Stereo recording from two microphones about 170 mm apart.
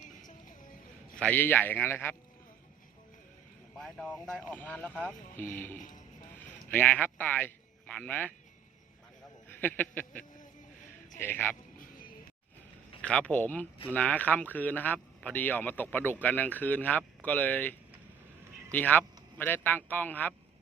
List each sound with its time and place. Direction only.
0.2 s music: 50° left (ahead or behind)
1.2 s speech: 10° left (ahead or behind)
3.8 s speech: 5° left (ahead or behind)
5.7 s music: 50° left (ahead or behind)
6.7 s speech: 10° left (ahead or behind)
9.6 s speech: 10° left (ahead or behind)
11.2 s speech: 10° left (ahead or behind)
13.0 s speech: 5° left (ahead or behind)